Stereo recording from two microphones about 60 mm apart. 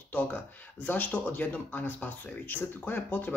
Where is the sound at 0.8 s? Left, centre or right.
Left.